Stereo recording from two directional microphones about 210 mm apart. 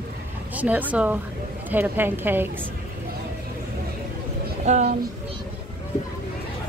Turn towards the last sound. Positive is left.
turn(degrees=-35)  # may be behind; listen again after turning